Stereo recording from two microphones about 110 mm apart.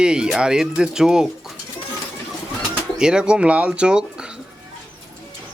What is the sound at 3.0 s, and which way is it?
Speech, 10° right (ahead or behind).